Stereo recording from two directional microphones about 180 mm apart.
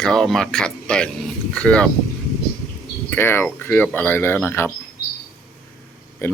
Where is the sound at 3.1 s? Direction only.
10° left (ahead or behind).